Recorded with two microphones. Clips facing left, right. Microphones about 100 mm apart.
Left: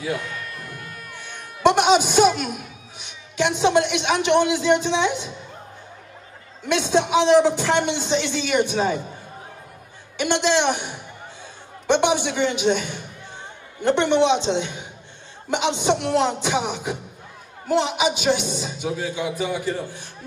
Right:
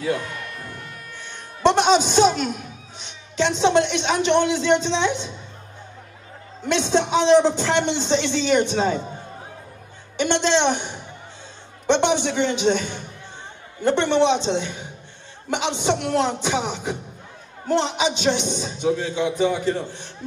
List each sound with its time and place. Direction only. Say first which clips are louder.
0.6 s music: even; 25° right (ahead or behind)
1.2 s a man's voice: left 1 dB; 10° left (ahead or behind)
6.7 s a man's voice: even; 10° left (ahead or behind)
10.2 s a man's voice: right 1 dB; 10° left (ahead or behind)